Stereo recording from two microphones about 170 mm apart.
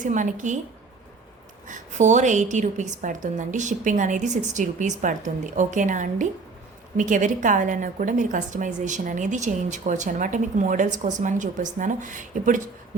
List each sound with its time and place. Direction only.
0.0 s a woman's voice: 50° right (ahead or behind)
1.6 s a woman's voice: 45° right (ahead or behind)